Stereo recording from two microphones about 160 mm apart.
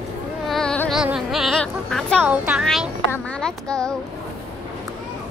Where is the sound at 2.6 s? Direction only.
Centre (ahead or behind).